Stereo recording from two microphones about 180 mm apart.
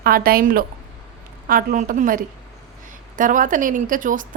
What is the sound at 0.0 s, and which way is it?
A woman's voice, 55° right (ahead or behind).